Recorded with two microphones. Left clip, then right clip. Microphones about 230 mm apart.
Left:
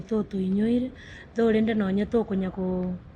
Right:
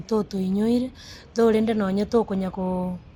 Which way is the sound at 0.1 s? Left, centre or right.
Right.